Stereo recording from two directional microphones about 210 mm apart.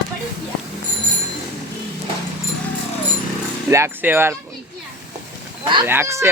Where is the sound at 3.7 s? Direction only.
10° right (ahead or behind).